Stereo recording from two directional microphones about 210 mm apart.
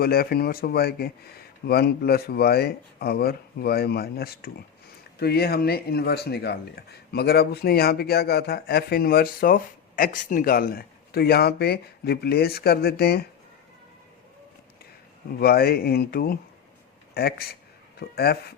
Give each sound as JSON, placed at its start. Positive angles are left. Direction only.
{"t": 0.0, "sound": "speech", "side_deg": 45}
{"t": 15.4, "sound": "speech", "side_deg": 50}